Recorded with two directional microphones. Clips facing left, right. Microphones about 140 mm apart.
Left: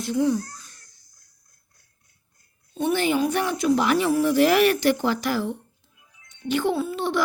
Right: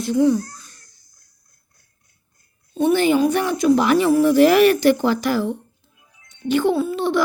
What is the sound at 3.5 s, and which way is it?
A woman's voice, 45° right (ahead or behind).